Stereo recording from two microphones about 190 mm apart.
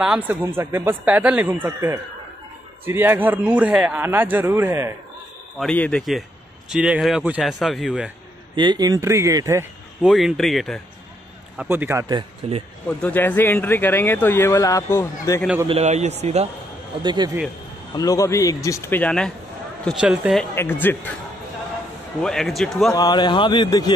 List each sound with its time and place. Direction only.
0.0 s a man's voice: 5° right (ahead or behind)
5.6 s a man's voice: 5° left (ahead or behind)
8.5 s speech: 20° right (ahead or behind)
10.0 s a man's voice: centre (ahead or behind)
11.5 s a man's voice: 10° right (ahead or behind)
12.2 s speech: 30° right (ahead or behind)
12.8 s speech: 10° left (ahead or behind)
15.7 s a man's voice: 35° right (ahead or behind)
17.0 s speech: 25° right (ahead or behind)
17.9 s a man's voice: 20° left (ahead or behind); by 20.4 s centre (ahead or behind)
20.5 s speech: 10° left (ahead or behind)
22.2 s a man's voice: 5° left (ahead or behind)
22.9 s speech: 20° left (ahead or behind)